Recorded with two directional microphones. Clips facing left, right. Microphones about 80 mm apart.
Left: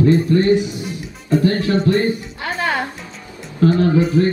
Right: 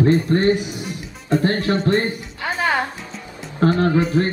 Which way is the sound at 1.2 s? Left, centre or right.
Right.